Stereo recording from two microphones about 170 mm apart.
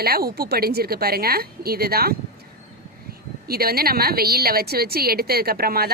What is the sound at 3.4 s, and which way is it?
A woman's voice, 65° right (ahead or behind).